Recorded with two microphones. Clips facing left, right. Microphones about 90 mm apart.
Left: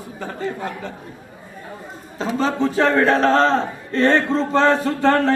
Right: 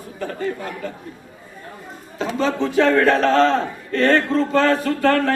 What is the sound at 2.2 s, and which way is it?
A man's voice, 35° left (ahead or behind).